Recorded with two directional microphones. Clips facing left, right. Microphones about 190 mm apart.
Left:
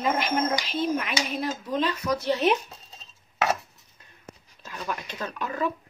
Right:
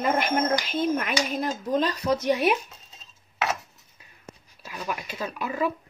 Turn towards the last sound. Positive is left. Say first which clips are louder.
# right 1 dB
turn(degrees=-10)  # may be behind; listen again after turning